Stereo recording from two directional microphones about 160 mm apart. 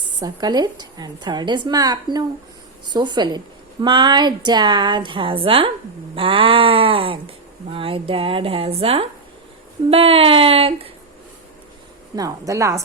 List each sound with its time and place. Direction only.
0.2 s a woman's voice: 25° right (ahead or behind)
12.1 s a woman's voice: 20° right (ahead or behind)